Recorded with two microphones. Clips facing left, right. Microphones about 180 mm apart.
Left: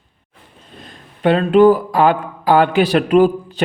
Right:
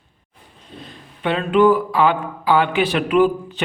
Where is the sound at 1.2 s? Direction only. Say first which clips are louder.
Left 5 dB; 40° left (ahead or behind).